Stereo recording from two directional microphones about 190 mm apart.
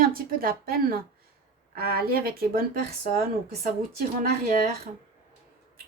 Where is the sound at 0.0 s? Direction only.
50° right (ahead or behind).